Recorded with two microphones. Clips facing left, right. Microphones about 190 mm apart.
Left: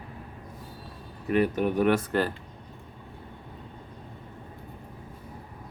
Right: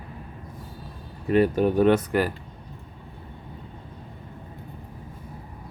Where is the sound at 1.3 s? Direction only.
30° right (ahead or behind).